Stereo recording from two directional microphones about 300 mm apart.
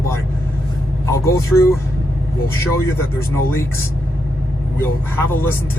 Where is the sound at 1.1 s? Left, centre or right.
Centre.